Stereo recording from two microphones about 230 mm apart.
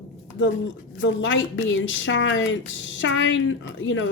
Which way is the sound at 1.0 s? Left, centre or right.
Left.